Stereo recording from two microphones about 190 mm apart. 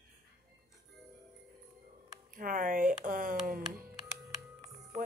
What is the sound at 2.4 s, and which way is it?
A woman's voice, 45° right (ahead or behind).